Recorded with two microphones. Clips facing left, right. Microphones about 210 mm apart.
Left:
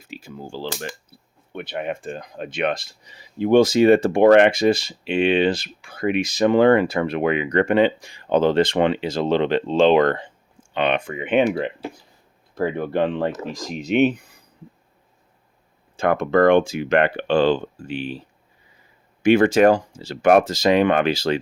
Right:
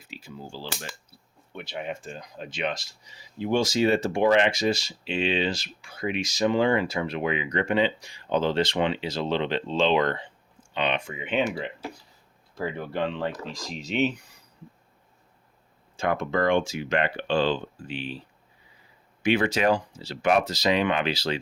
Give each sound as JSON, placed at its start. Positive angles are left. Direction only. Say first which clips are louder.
{"t": 0.1, "sound": "speech", "louder": "left 6 dB", "side_deg": 50}
{"t": 16.0, "sound": "speech", "louder": "left 8 dB", "side_deg": 55}
{"t": 19.2, "sound": "speech", "louder": "left 9 dB", "side_deg": 50}